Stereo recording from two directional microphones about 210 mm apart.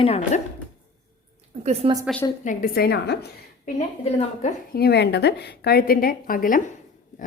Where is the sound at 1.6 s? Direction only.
30° right (ahead or behind).